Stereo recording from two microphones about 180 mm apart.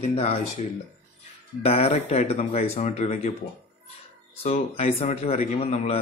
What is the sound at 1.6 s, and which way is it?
A man's voice, 35° left (ahead or behind).